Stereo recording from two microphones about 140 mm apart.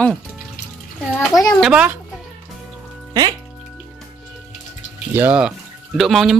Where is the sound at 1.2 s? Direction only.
25° left (ahead or behind).